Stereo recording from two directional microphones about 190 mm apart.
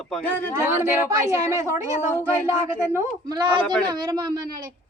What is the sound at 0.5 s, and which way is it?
A woman's voice, 15° right (ahead or behind).